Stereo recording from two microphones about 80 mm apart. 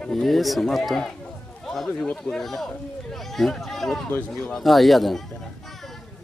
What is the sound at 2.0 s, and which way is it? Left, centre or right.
Speech, centre.